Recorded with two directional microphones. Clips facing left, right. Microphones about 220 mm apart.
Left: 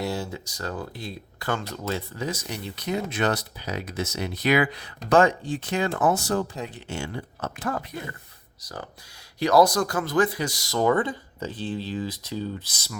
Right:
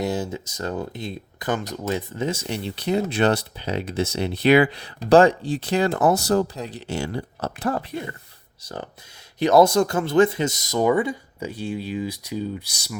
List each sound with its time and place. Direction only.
0.0 s speech: 20° right (ahead or behind)